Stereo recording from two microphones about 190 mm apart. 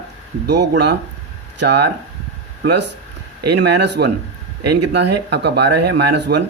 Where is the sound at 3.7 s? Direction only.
65° right (ahead or behind).